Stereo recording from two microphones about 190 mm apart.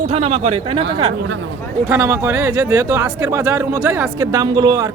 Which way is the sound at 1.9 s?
15° right (ahead or behind).